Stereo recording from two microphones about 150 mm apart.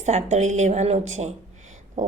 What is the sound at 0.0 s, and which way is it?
A woman's voice, 50° right (ahead or behind).